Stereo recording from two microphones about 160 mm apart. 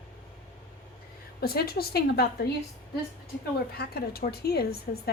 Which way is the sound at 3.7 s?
80° left.